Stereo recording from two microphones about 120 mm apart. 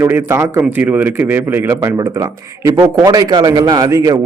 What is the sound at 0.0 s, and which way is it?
Speech, 20° right (ahead or behind).